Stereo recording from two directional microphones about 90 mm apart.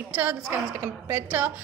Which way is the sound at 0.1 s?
20° right (ahead or behind).